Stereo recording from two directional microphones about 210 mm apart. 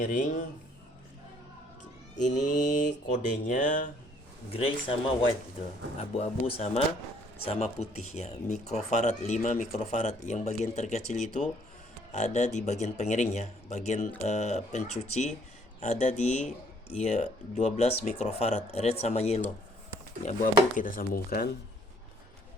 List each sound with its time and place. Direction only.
0.0 s speech: 35° left (ahead or behind)
2.3 s speech: 35° left (ahead or behind)
4.5 s speech: 25° left (ahead or behind)
6.0 s speech: 30° left (ahead or behind)